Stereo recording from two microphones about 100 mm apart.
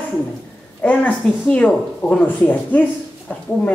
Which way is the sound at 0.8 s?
15° left (ahead or behind).